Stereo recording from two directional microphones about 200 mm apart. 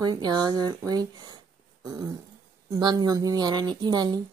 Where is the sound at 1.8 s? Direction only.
20° right (ahead or behind).